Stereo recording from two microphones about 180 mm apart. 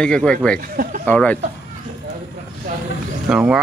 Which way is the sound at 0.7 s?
50° right (ahead or behind).